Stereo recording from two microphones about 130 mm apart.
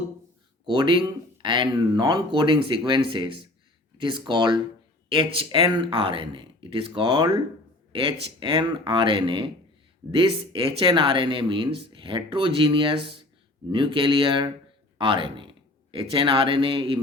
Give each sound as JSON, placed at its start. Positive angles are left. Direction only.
{"t": 0.6, "sound": "speech", "side_deg": -35}